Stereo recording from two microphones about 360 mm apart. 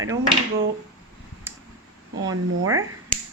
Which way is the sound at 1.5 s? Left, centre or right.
Centre.